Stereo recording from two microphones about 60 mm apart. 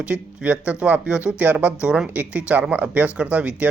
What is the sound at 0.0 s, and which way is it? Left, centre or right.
Speech, right.